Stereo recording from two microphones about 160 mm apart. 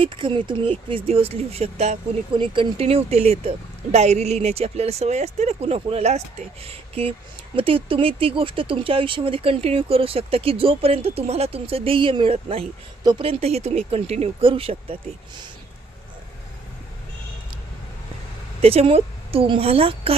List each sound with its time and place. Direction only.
0.0 s speech: 30° right (ahead or behind)
2.3 s speech: 30° right (ahead or behind)
18.6 s speech: 40° right (ahead or behind)